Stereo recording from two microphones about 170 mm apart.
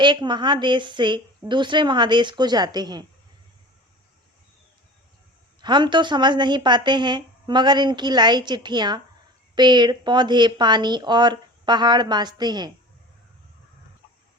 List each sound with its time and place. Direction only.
0.0 s a woman's voice: 25° right (ahead or behind)
5.6 s a woman's voice: 25° right (ahead or behind)